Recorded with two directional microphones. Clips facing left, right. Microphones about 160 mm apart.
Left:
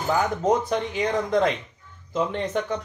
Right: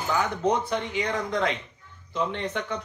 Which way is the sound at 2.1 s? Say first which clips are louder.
Left 4 dB; 45° left (ahead or behind).